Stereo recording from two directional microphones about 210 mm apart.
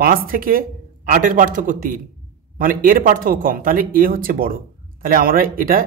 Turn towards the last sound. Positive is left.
turn(degrees=-45)  # may be behind; listen again after turning